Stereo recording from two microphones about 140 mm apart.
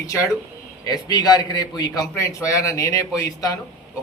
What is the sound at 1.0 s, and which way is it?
A man's voice, 30° left (ahead or behind).